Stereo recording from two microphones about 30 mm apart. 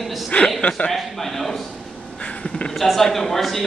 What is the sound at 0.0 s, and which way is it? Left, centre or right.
Chuckle, centre.